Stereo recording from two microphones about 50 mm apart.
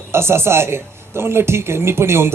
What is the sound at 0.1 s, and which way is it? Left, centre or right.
Speech, right.